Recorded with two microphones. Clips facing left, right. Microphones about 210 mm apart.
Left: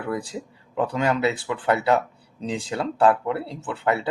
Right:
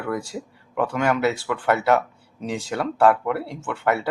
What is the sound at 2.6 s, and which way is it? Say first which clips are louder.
Speech: right 1 dB; 20° left (ahead or behind).